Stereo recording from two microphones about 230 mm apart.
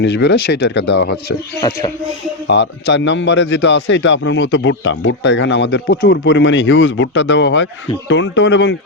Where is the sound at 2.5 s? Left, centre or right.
Left.